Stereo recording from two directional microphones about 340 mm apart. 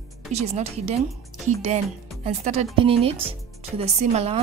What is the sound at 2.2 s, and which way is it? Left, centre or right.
A woman's voice, centre.